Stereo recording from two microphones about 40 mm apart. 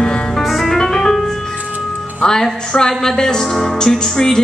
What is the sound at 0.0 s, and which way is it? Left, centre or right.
Music, left.